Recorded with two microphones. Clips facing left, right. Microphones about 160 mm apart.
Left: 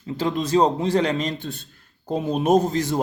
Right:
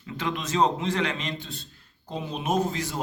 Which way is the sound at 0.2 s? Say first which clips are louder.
Left 5 dB; 35° left (ahead or behind).